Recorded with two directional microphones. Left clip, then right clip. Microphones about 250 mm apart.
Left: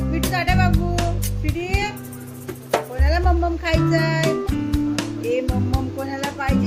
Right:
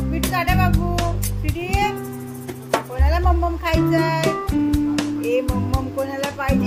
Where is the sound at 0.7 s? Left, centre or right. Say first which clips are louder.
Right 1 dB; centre.